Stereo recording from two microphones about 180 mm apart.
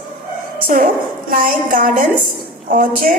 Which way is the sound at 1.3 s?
50° right (ahead or behind).